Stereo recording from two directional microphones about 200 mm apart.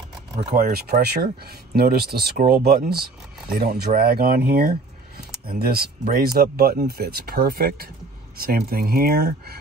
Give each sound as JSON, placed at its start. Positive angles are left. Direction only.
{"t": 0.6, "sound": "speech", "side_deg": -50}